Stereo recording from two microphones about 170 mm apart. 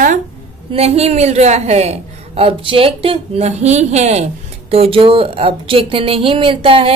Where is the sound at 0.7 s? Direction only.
40° right (ahead or behind).